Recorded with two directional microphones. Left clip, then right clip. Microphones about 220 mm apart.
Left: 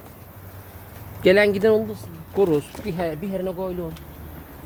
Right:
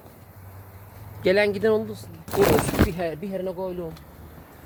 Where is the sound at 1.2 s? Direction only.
15° left (ahead or behind).